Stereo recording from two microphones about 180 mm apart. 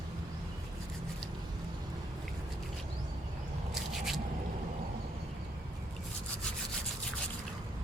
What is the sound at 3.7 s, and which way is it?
Scissors, centre (ahead or behind).